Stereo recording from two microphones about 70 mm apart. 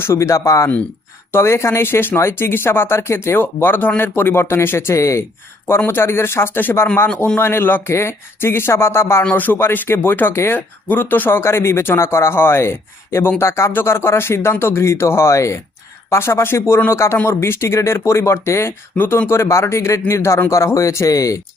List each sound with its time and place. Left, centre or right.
0.0 s speech: left
5.6 s speech: left
9.3 s speech: left
10.8 s speech: left